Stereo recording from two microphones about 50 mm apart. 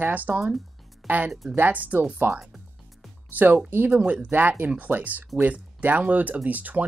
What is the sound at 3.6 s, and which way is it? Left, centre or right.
Speech, right.